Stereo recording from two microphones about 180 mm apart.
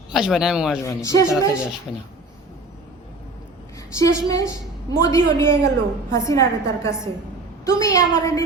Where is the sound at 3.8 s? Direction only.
15° left (ahead or behind).